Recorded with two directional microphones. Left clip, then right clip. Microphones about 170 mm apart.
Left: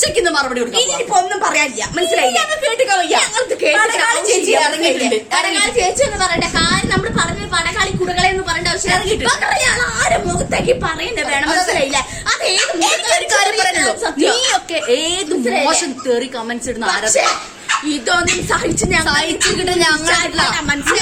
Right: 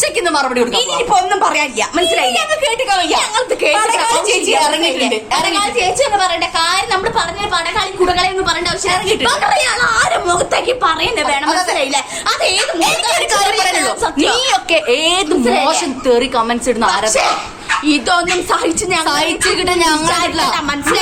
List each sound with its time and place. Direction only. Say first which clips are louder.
0.0 s a woman's voice: right 1 dB; 25° left (ahead or behind)
12.8 s a woman's voice: right 2 dB; 30° left (ahead or behind)
13.1 s a woman's voice: right 1 dB; 15° left (ahead or behind)
16.6 s a woman's voice: right 4 dB; 10° left (ahead or behind)